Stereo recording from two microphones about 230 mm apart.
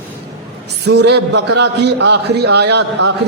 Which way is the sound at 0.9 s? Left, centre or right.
Right.